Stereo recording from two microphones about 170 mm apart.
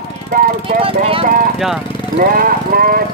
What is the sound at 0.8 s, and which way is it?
Speech, 35° right (ahead or behind).